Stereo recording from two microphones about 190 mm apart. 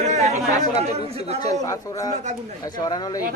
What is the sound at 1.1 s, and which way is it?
Speech, 35° right (ahead or behind).